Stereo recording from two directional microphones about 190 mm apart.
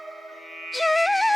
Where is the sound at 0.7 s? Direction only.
Centre (ahead or behind).